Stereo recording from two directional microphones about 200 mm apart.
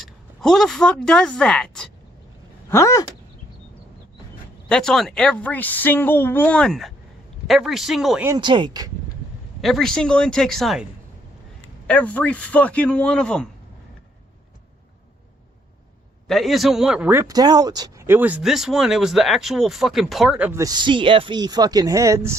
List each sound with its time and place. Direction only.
0.0 s speech: centre (ahead or behind)
2.6 s speech: 15° left (ahead or behind)
4.7 s a woman's voice: 5° left (ahead or behind)
8.3 s speech: 25° right (ahead or behind)
9.6 s speech: centre (ahead or behind)
11.9 s a woman's voice: 5° left (ahead or behind)
16.2 s a man's voice: centre (ahead or behind); by 22.4 s 15° right (ahead or behind)